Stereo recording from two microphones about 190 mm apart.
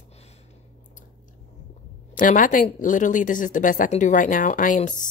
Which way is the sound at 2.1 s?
45° left (ahead or behind).